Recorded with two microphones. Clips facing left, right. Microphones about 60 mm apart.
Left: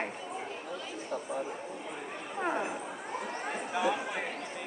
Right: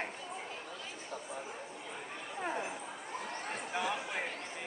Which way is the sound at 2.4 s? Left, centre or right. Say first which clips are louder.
Left 5 dB; left.